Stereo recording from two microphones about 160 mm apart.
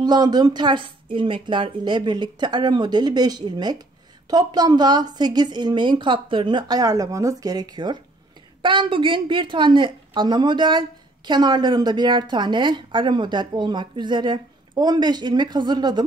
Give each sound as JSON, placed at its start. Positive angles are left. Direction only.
{"t": 0.0, "sound": "a woman's voice", "side_deg": -25}